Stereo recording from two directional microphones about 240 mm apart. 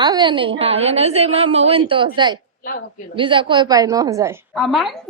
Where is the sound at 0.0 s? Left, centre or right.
Centre.